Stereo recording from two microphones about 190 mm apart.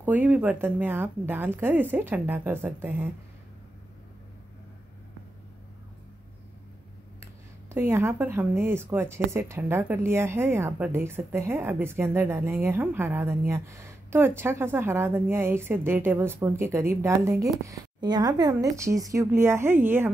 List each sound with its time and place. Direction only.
0.0 s speech: 10° right (ahead or behind)
7.7 s speech: 15° right (ahead or behind)